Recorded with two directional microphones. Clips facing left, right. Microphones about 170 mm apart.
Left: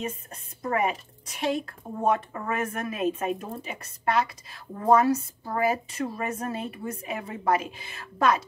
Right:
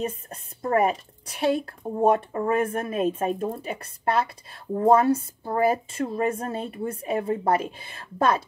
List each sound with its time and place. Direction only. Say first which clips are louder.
0.6 s a woman's voice: right 4 dB; 40° right (ahead or behind)